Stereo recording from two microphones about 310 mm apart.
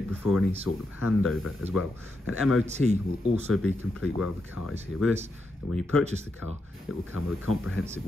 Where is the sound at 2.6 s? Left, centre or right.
Right.